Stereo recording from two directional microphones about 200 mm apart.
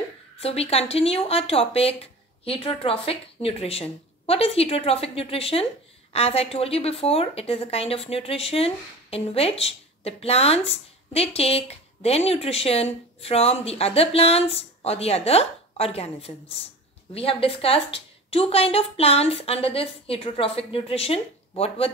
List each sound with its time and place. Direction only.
0.4 s a woman's voice: 30° left (ahead or behind)